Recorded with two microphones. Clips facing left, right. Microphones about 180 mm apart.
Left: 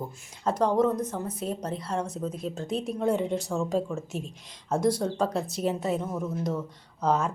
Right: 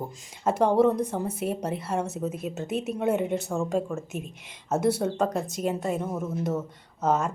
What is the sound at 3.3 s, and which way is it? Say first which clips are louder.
Speech: right 1 dB; 15° right (ahead or behind).